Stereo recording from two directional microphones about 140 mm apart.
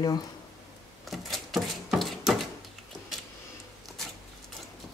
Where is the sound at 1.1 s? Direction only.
Centre (ahead or behind).